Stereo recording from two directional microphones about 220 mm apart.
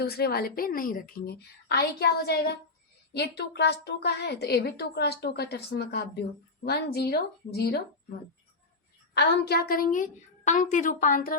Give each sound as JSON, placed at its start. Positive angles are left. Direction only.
{"t": 0.0, "sound": "a woman's voice", "side_deg": 45}
{"t": 9.1, "sound": "a woman's voice", "side_deg": 45}